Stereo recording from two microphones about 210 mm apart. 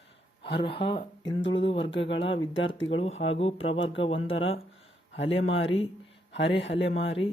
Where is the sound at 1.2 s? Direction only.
60° left (ahead or behind).